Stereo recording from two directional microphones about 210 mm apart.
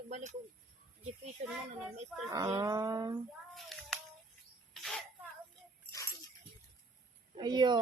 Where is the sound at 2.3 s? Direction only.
15° right (ahead or behind).